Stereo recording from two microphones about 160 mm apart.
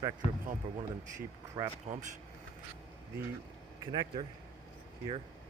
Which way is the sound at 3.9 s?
30° right (ahead or behind).